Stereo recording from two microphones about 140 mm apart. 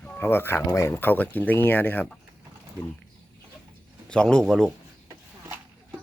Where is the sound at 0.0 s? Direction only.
10° left (ahead or behind).